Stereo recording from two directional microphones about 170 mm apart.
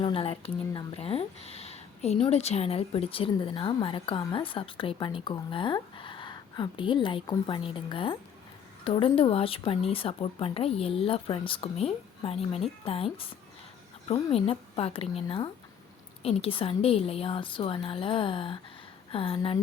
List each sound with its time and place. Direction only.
0.0 s speech: 35° left (ahead or behind)
14.1 s speech: 35° left (ahead or behind)